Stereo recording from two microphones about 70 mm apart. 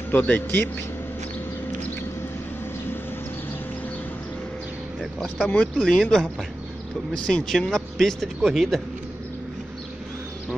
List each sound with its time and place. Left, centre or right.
0.1 s speech: left
5.5 s speech: centre
7.2 s speech: centre